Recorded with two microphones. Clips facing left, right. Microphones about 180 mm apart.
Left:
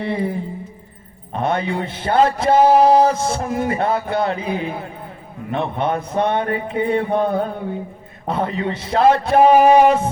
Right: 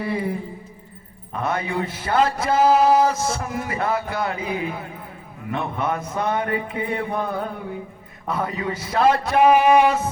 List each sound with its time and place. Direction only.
0.0 s a man's voice: 25° left (ahead or behind)